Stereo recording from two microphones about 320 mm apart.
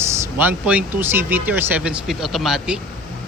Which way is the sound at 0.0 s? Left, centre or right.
Centre.